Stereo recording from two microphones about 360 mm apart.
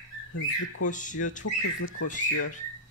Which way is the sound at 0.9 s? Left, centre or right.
Left.